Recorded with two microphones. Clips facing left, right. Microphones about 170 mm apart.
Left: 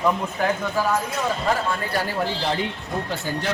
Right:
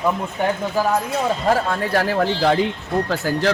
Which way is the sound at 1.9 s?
90° right.